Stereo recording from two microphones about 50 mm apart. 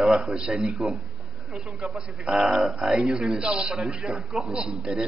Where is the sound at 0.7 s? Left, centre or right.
Centre.